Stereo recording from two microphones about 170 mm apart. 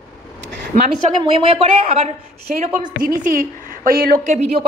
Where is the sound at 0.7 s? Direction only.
55° right (ahead or behind).